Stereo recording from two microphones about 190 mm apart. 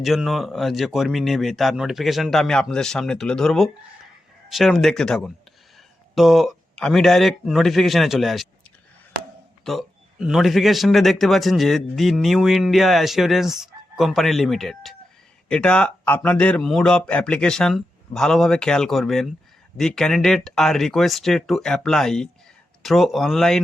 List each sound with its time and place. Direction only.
0.0 s a man's voice: centre (ahead or behind)
9.6 s a man's voice: centre (ahead or behind)